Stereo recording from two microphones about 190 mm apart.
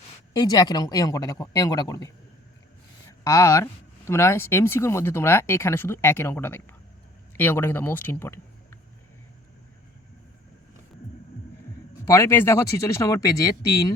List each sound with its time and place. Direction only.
0.3 s speech: 20° left (ahead or behind)
12.0 s speech: 15° left (ahead or behind)